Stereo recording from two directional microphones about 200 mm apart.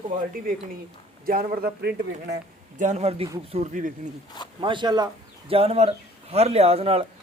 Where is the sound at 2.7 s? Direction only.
35° right (ahead or behind).